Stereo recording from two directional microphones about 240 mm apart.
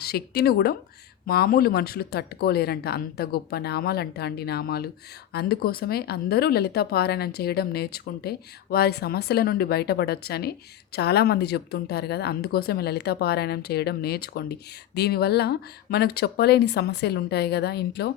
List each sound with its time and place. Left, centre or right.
0.0 s speech: left